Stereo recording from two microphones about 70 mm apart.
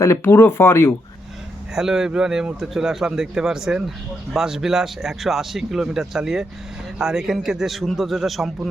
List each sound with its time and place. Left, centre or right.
0.3 s speech: left
1.7 s a man's voice: centre